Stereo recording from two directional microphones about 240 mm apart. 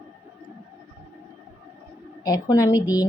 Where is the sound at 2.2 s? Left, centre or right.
Centre.